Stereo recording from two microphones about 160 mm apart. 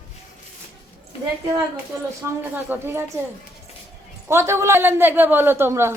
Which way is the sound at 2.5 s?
10° right (ahead or behind).